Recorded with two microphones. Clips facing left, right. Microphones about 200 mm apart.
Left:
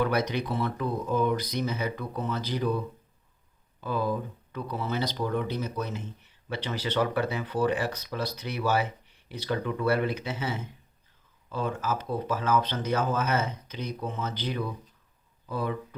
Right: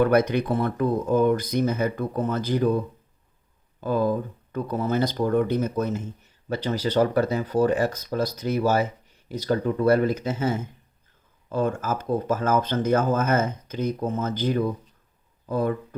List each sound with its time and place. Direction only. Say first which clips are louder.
0.0 s speech: right 7 dB; 55° right (ahead or behind)